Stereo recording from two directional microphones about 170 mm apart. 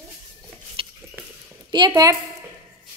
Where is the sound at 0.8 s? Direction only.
30° right (ahead or behind).